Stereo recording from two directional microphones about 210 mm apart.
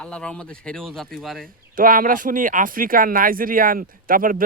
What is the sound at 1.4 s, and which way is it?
Speech, 40° right (ahead or behind).